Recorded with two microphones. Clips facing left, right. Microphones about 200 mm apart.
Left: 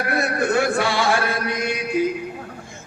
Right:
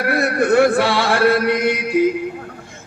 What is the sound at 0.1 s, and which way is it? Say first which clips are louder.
Mantra: right 5 dB; 60° right (ahead or behind).